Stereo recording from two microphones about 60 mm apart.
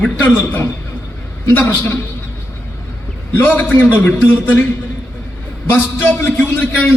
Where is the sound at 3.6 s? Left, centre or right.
Left.